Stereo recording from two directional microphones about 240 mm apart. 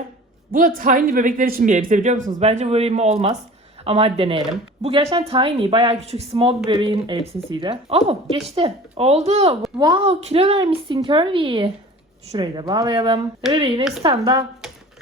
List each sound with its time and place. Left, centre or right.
0.5 s a man's voice: right